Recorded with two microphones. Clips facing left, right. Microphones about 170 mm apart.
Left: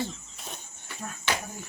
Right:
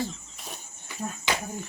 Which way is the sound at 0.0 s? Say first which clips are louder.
Right 1 dB; centre (ahead or behind).